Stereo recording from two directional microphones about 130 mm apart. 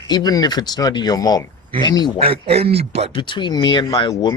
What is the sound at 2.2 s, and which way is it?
Speech, 50° right (ahead or behind).